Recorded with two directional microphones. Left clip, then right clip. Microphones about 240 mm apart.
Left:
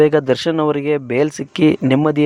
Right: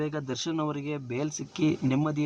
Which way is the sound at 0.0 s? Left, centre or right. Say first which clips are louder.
Left 19 dB; left.